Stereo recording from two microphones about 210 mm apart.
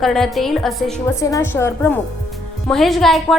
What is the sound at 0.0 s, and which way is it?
A woman's voice, centre (ahead or behind).